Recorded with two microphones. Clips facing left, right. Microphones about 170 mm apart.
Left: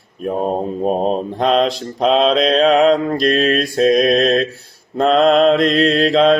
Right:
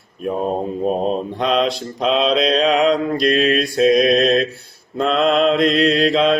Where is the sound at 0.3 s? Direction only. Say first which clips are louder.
Left 2 dB; 45° left (ahead or behind).